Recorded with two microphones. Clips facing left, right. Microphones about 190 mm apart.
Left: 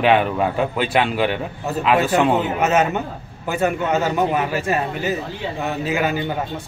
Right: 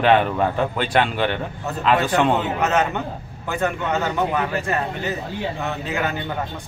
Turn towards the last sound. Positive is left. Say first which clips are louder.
# left 4 dB
turn(degrees=10)  # may be behind; listen again after turning